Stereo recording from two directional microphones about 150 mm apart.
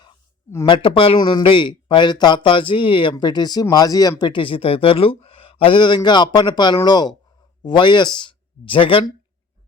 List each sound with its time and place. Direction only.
0.7 s speech: 35° left (ahead or behind)